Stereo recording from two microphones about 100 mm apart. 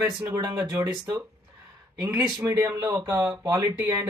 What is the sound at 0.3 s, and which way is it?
Speech, 35° right (ahead or behind).